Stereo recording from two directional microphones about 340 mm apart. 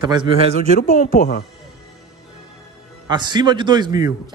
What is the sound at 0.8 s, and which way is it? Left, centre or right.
Speech, left.